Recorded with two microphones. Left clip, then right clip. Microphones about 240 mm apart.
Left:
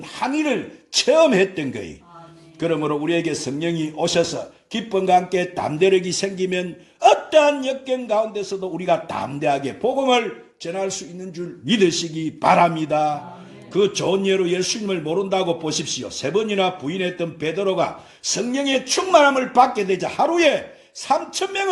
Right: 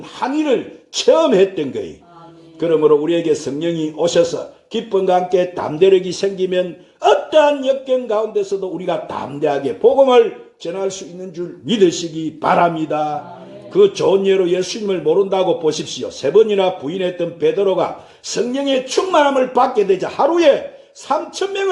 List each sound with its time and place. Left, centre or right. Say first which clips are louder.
0.2 s a man's voice: right 5 dB; left